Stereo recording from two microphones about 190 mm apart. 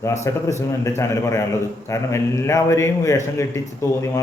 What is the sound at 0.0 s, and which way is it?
Speech, 15° left (ahead or behind).